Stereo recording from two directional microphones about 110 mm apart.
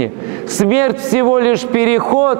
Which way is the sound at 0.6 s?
20° right (ahead or behind).